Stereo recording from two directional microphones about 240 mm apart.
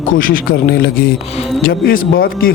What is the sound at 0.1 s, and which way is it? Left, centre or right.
Speech, left.